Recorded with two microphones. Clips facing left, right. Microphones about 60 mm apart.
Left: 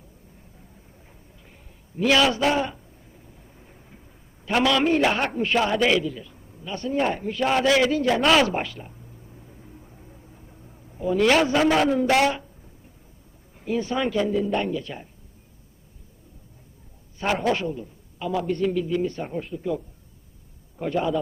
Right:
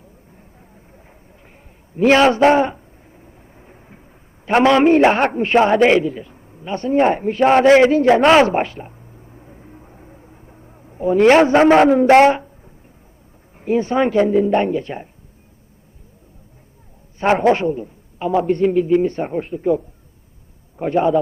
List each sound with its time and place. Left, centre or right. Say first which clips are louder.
0.3 s vehicle: right 4 dB; right
2.0 s a sound: right 8 dB; right
4.4 s a man's voice: right 8 dB; right
17.2 s a man's voice: right 9 dB; right
20.8 s a man's voice: right 8 dB; right